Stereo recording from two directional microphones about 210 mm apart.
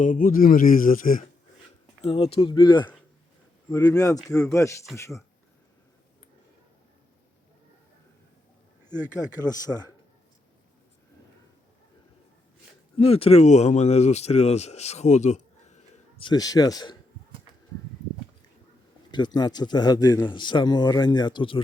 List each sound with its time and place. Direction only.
0.0 s speech: 40° left (ahead or behind)
2.0 s a man's voice: 30° left (ahead or behind)
8.8 s speech: 10° right (ahead or behind)
9.5 s a man's voice: 15° left (ahead or behind)
13.0 s speech: 25° left (ahead or behind)
16.2 s a man's voice: 20° left (ahead or behind)
19.1 s speech: 20° left (ahead or behind)